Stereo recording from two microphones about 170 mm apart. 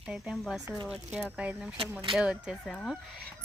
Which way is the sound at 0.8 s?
5° right (ahead or behind).